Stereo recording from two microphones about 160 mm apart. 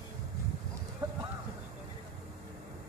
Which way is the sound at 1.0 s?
15° right (ahead or behind).